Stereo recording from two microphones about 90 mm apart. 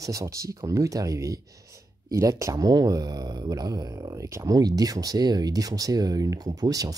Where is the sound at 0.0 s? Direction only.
35° right (ahead or behind).